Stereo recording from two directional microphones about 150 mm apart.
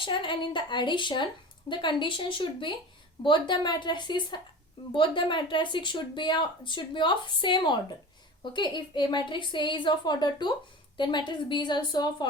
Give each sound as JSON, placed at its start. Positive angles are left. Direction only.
{"t": 0.0, "sound": "speech", "side_deg": 35}